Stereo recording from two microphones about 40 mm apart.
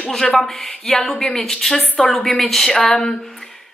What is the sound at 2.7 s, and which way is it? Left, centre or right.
Speech, centre.